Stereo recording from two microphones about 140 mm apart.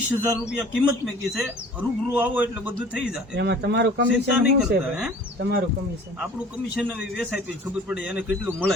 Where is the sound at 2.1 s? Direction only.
15° right (ahead or behind).